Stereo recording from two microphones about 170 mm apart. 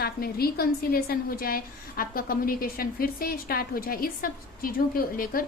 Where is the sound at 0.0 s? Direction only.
65° left (ahead or behind).